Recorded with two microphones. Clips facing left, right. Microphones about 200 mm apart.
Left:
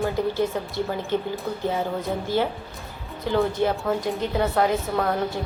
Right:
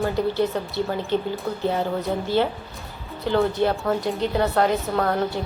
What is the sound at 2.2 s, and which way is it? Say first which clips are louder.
A woman's voice: right 2 dB; 15° left (ahead or behind).